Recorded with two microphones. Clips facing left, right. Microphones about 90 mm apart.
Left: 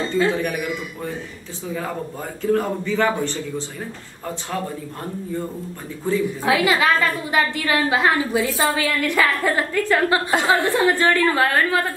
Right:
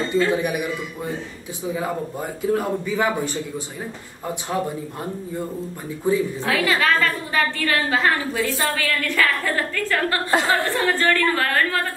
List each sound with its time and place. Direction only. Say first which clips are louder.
0.3 s a man's voice: right 1 dB; 15° right (ahead or behind)
6.0 s a man's voice: right 2 dB; 15° right (ahead or behind)
6.4 s a woman's voice: left 3 dB; 15° left (ahead or behind)
8.7 s a woman's voice: left 2 dB; 15° left (ahead or behind)
10.3 s a woman's voice: right 1 dB; centre (ahead or behind)
10.9 s a woman's voice: right 1 dB; 15° left (ahead or behind)